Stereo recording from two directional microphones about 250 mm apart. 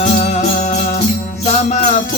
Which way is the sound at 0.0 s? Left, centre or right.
Left.